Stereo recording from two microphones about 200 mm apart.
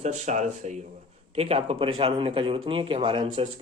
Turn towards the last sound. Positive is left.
turn(degrees=-25)  # may be behind; listen again after turning